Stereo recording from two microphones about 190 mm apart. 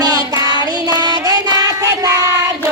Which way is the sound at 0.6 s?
20° right (ahead or behind).